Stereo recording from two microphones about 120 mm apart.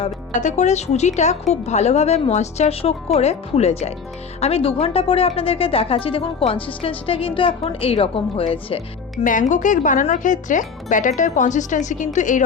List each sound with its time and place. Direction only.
0.3 s a woman's voice: 80° left; by 8.8 s 50° left (ahead or behind)
9.1 s speech: 90° left